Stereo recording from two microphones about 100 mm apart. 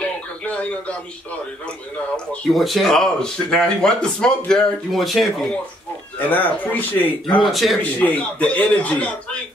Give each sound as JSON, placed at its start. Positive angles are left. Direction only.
{"t": 0.0, "sound": "a sound", "side_deg": 10}
{"t": 2.1, "sound": "speech", "side_deg": 5}
{"t": 6.1, "sound": "speech", "side_deg": 15}
{"t": 7.5, "sound": "speech", "side_deg": 0}
{"t": 7.8, "sound": "speech", "side_deg": 15}